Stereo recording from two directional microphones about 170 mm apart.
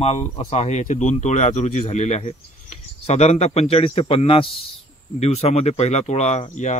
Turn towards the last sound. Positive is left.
turn(degrees=45)  # may be behind; listen again after turning